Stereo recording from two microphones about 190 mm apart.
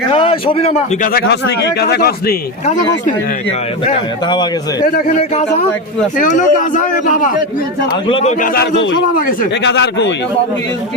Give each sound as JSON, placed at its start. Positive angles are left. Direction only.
{"t": 0.1, "sound": "a man's voice", "side_deg": 30}
{"t": 1.1, "sound": "speech", "side_deg": 60}
{"t": 4.3, "sound": "a man's voice", "side_deg": 20}
{"t": 5.0, "sound": "a man's voice", "side_deg": 35}
{"t": 8.0, "sound": "a man's voice", "side_deg": 30}
{"t": 8.5, "sound": "a man's voice", "side_deg": 70}
{"t": 9.1, "sound": "a man's voice", "side_deg": 45}
{"t": 9.6, "sound": "a man's voice", "side_deg": 70}